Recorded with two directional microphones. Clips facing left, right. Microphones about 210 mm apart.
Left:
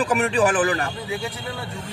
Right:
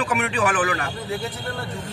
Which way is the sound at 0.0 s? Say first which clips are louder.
Left 3 dB; 35° left (ahead or behind).